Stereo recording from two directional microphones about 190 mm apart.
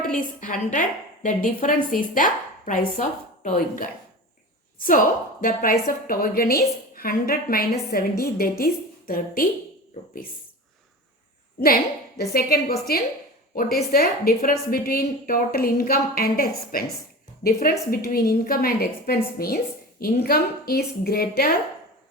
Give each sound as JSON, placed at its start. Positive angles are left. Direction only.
{"t": 0.2, "sound": "a woman's voice", "side_deg": 45}
{"t": 5.4, "sound": "a woman's voice", "side_deg": 45}
{"t": 11.6, "sound": "a woman's voice", "side_deg": 50}